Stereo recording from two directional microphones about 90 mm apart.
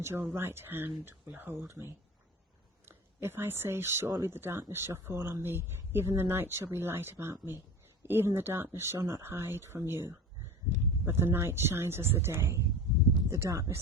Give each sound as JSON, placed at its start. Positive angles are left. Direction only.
{"t": 0.0, "sound": "speech", "side_deg": -25}
{"t": 11.0, "sound": "speech", "side_deg": -25}